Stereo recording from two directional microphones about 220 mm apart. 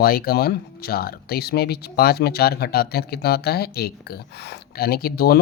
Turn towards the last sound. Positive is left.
turn(degrees=45)  # may be behind; listen again after turning